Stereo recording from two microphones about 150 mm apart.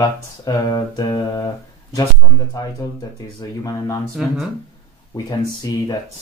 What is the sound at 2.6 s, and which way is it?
Speech, 20° left (ahead or behind).